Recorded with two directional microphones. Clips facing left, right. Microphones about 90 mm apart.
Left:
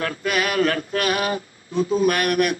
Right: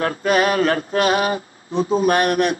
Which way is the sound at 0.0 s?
35° right (ahead or behind).